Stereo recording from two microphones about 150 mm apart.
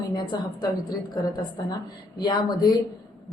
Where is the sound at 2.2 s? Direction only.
25° left (ahead or behind).